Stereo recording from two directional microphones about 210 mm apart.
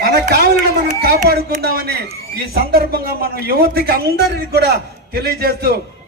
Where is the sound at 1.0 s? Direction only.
50° right (ahead or behind).